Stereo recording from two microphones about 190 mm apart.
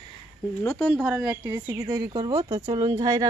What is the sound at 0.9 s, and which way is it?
A woman's voice, 10° right (ahead or behind).